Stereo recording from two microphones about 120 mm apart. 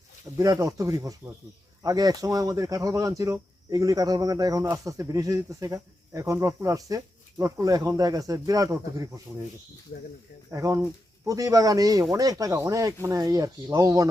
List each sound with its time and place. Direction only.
0.3 s speech: 30° right (ahead or behind)
10.5 s a man's voice: 25° right (ahead or behind)